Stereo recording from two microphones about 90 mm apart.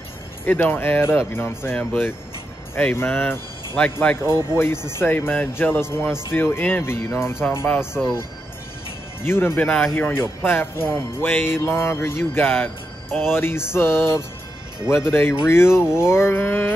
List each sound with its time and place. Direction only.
0.5 s music: 20° left (ahead or behind)
4.6 s music: 25° left (ahead or behind)
9.2 s music: 25° left (ahead or behind)